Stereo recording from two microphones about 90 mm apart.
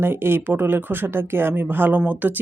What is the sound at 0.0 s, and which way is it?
Speech, 25° right (ahead or behind).